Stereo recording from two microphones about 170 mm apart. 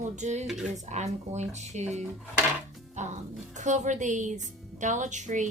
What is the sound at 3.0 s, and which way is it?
Music, 45° right (ahead or behind).